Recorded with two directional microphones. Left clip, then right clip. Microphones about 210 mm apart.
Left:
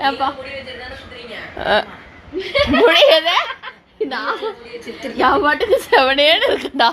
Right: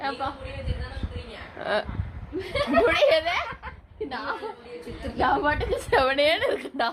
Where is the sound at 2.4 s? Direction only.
25° right (ahead or behind).